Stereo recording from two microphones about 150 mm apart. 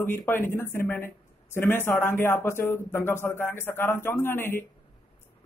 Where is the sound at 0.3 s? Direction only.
15° left (ahead or behind).